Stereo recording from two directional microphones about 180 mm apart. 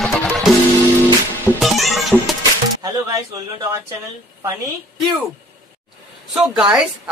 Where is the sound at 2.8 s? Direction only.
20° right (ahead or behind).